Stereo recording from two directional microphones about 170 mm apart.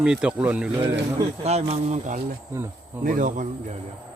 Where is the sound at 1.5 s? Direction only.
40° right (ahead or behind).